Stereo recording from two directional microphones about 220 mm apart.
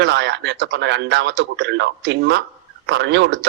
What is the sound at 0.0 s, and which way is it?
A man's voice, 50° right (ahead or behind).